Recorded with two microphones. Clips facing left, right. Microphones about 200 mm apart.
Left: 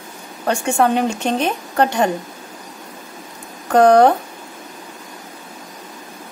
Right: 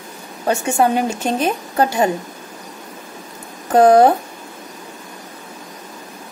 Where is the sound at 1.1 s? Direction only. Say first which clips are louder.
Even; 40° right (ahead or behind).